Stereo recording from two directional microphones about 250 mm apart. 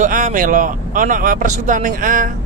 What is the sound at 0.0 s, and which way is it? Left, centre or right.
Speech, right.